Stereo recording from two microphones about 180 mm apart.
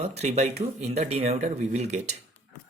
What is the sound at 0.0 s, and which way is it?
Speech, 35° right (ahead or behind).